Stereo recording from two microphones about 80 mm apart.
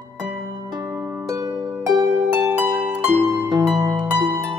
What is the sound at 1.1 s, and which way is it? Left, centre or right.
Harp, right.